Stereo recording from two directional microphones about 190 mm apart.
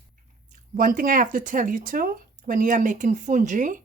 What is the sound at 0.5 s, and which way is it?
Speech, 45° right (ahead or behind).